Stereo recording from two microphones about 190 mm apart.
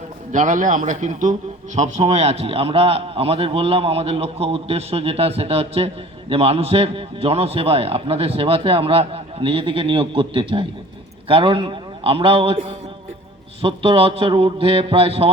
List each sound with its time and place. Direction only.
0.3 s a man's voice: 40° right (ahead or behind)